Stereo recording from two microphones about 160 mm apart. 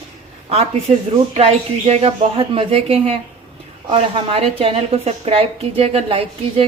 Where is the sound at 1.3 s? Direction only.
45° right (ahead or behind).